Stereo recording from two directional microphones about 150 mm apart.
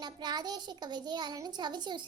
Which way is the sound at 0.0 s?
30° right (ahead or behind).